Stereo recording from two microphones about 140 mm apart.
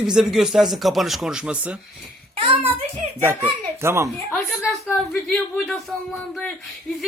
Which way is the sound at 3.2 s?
15° right (ahead or behind).